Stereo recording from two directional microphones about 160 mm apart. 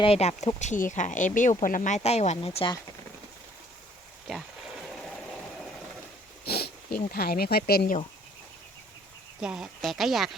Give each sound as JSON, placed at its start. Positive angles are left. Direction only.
{"t": 0.0, "sound": "speech", "side_deg": 40}
{"t": 4.9, "sound": "a sound", "side_deg": 0}
{"t": 6.4, "sound": "speech", "side_deg": 80}
{"t": 9.4, "sound": "speech", "side_deg": -5}